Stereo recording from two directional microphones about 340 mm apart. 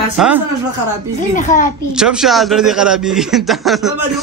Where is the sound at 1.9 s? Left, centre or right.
Centre.